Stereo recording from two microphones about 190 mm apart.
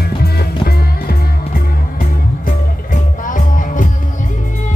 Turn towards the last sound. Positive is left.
turn(degrees=45)  # may be behind; listen again after turning